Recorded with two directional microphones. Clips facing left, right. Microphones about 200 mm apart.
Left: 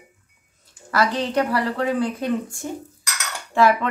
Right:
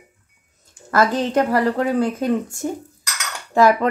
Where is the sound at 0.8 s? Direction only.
45° right (ahead or behind).